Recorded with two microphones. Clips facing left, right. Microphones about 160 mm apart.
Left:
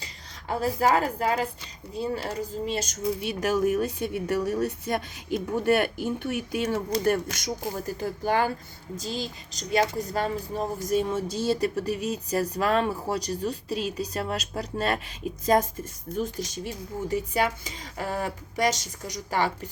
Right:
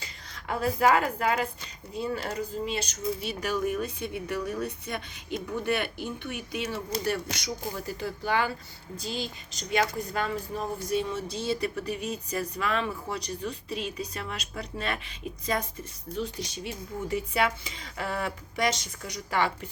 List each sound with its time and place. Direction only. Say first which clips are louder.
0.0 s a woman's voice: even; 35° left (ahead or behind)